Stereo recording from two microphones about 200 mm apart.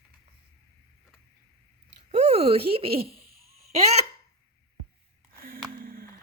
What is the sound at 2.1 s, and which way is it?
Speech, 30° right (ahead or behind).